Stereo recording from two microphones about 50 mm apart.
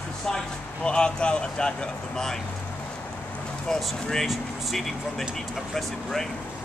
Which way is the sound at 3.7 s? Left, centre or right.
Centre.